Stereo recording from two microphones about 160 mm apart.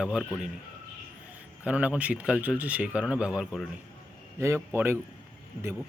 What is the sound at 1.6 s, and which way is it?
Speech, 10° right (ahead or behind).